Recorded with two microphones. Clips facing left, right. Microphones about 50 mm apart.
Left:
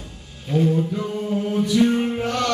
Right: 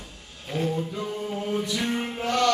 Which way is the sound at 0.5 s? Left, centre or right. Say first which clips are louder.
Left 8 dB; centre.